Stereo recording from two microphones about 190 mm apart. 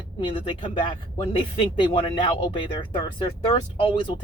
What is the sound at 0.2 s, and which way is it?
Speech, 25° left (ahead or behind).